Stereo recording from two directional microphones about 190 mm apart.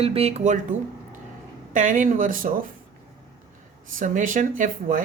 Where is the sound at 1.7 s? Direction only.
45° right (ahead or behind).